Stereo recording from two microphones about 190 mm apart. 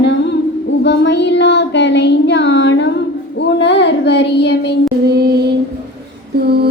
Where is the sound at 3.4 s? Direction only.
65° left (ahead or behind).